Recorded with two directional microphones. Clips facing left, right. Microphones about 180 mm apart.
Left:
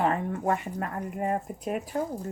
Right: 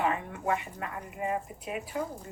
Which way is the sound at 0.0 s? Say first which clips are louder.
Left 4 dB; 45° left (ahead or behind).